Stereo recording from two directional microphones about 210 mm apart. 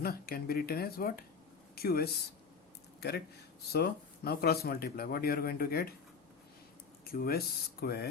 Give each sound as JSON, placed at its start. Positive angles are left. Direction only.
{"t": 0.0, "sound": "speech", "side_deg": 45}
{"t": 3.7, "sound": "speech", "side_deg": 50}
{"t": 7.1, "sound": "speech", "side_deg": 45}